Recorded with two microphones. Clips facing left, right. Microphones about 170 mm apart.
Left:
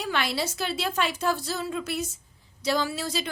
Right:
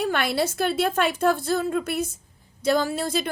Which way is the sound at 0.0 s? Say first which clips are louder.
Right 5 dB; 55° right (ahead or behind).